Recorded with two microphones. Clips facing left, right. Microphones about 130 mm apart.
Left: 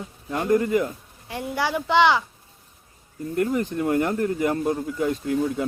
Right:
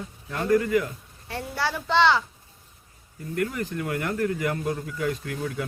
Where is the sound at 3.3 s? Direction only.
25° left (ahead or behind).